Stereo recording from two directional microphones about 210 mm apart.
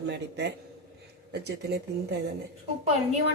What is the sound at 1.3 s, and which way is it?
Speech, 50° right (ahead or behind).